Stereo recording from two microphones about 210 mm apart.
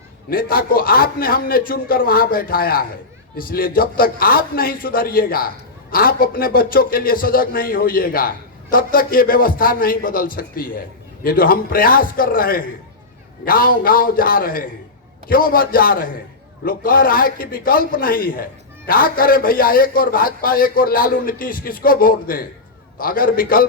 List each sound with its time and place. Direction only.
0.3 s a man's voice: 45° left (ahead or behind)